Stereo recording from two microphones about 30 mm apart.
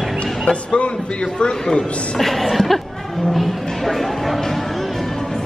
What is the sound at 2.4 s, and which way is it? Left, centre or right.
Speech, centre.